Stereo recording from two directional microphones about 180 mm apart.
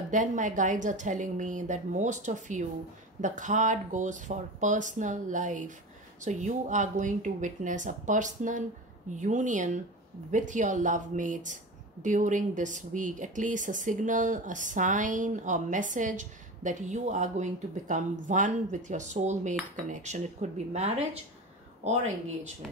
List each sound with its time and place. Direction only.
0.1 s speech: 45° right (ahead or behind)
18.9 s cutlery: 40° right (ahead or behind)